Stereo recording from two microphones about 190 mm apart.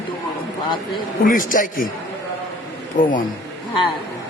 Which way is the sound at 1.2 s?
45° left (ahead or behind).